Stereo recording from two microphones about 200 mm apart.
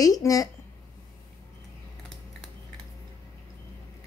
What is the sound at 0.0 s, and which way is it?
Speech, 15° left (ahead or behind).